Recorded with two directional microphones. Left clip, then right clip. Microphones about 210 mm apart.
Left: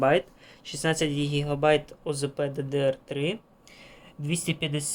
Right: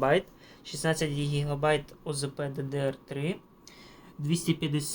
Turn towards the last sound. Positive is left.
turn(degrees=35)  # may be behind; listen again after turning